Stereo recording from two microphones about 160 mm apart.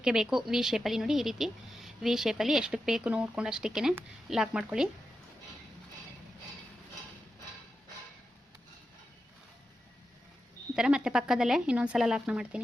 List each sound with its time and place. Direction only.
0.0 s a woman's voice: 5° right (ahead or behind)
10.8 s a woman's voice: 5° right (ahead or behind)